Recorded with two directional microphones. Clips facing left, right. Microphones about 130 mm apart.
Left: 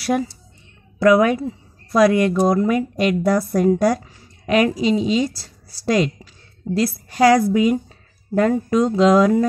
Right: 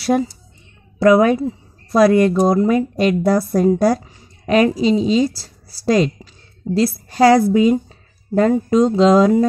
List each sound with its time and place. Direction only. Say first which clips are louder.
0.0 s a woman's voice: right 3 dB; 30° right (ahead or behind)
7.7 s a sound: right 3 dB; 30° right (ahead or behind)
8.5 s a woman's voice: right 3 dB; 25° right (ahead or behind)